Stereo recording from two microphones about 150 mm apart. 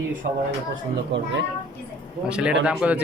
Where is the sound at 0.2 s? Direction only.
60° right (ahead or behind).